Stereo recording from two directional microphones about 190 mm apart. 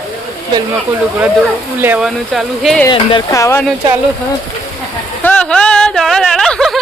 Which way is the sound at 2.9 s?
20° left (ahead or behind).